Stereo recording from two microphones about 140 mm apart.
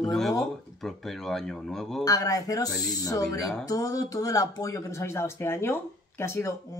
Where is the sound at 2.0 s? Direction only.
25° left (ahead or behind).